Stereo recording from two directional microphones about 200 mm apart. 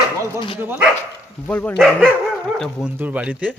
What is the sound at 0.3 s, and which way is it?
Speech, 25° left (ahead or behind).